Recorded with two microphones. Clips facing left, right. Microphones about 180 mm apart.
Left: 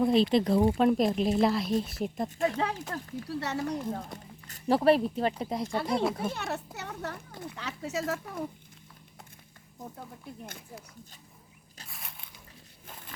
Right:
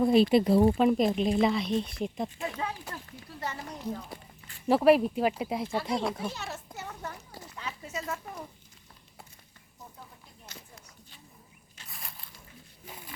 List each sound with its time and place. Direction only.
0.0 s a woman's voice: 5° right (ahead or behind)
2.9 s speech: 75° left (ahead or behind)
4.7 s a woman's voice: 10° right (ahead or behind)
6.2 s a child's voice: 55° left (ahead or behind); by 7.2 s 70° left (ahead or behind)
7.4 s speech: 80° left
11.9 s a sound: centre (ahead or behind)